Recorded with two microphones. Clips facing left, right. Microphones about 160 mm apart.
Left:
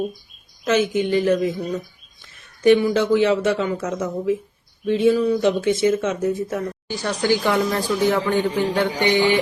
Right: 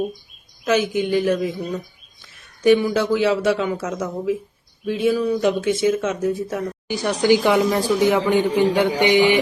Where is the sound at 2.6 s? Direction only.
10° right (ahead or behind).